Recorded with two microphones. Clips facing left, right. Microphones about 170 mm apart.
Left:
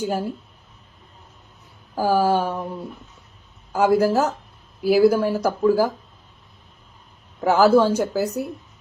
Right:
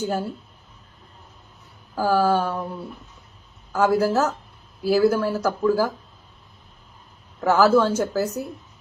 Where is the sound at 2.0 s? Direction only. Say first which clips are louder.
Left 1 dB; 15° left (ahead or behind).